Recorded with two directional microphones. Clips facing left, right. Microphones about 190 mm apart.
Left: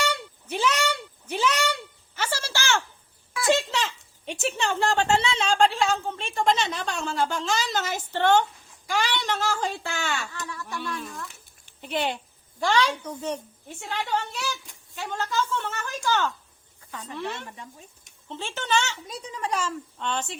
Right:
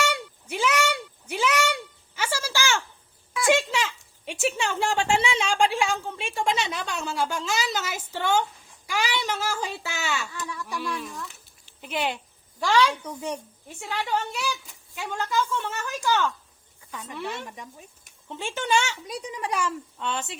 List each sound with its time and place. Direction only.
0.0 s a sound: 10° right (ahead or behind)
4.3 s a woman's voice: 5° right (ahead or behind)
11.8 s speech: 5° right (ahead or behind)
13.2 s a woman's voice: 10° right (ahead or behind)